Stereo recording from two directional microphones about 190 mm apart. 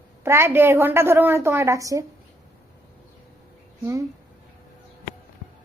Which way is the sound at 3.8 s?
15° right (ahead or behind).